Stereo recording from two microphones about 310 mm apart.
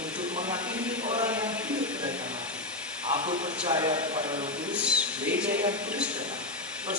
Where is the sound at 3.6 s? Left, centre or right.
Centre.